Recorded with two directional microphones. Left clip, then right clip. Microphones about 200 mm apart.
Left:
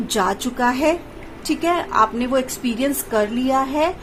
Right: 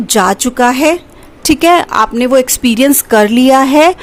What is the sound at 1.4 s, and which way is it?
A woman's voice, 50° right (ahead or behind).